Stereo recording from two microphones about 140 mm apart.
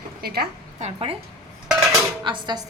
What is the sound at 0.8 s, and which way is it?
Speech, 50° right (ahead or behind).